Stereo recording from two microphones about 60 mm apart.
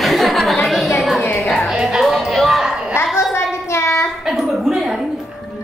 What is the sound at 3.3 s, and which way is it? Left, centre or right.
Child singing, left.